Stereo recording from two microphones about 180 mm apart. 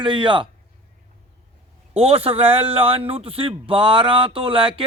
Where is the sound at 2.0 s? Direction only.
35° right (ahead or behind).